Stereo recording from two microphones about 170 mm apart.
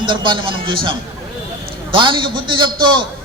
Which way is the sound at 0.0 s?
30° right (ahead or behind).